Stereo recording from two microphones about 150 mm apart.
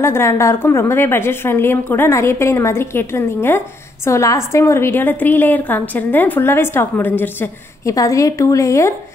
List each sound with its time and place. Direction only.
0.0 s a woman's voice: 15° left (ahead or behind)